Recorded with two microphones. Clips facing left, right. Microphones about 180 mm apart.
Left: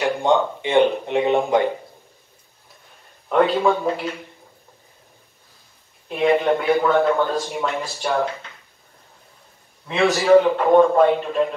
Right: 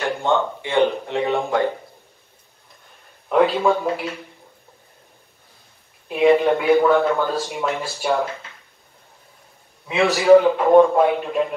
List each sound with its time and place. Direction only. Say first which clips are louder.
0.0 s speech: left 2 dB; 15° left (ahead or behind)
3.3 s a man's voice: even; centre (ahead or behind)
6.0 s a man's voice: right 3 dB; centre (ahead or behind)
9.8 s a man's voice: right 2 dB; centre (ahead or behind)